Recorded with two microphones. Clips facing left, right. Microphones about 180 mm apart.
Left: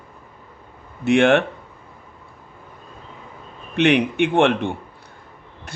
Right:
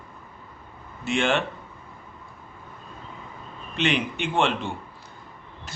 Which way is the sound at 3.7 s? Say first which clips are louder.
Left 9 dB; 60° left (ahead or behind).